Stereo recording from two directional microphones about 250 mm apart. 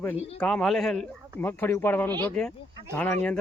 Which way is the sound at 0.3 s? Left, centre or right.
Centre.